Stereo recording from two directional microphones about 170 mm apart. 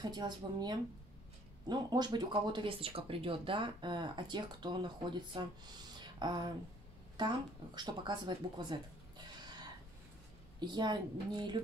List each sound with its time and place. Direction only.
0.0 s speech: 25° right (ahead or behind)
5.9 s a sound: 25° right (ahead or behind)
7.2 s speech: 25° right (ahead or behind)
10.6 s speech: 25° right (ahead or behind)